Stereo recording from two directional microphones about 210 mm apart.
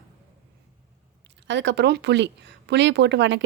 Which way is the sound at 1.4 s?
55° right (ahead or behind).